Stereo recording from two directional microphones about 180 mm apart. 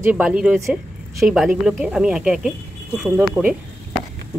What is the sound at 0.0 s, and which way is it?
A woman's voice, 5° right (ahead or behind).